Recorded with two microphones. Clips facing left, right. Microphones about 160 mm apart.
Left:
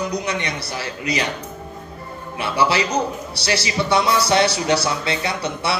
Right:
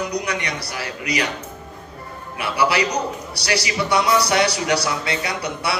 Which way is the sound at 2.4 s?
25° left (ahead or behind).